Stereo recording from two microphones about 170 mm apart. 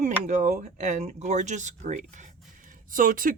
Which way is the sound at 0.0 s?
45° right (ahead or behind).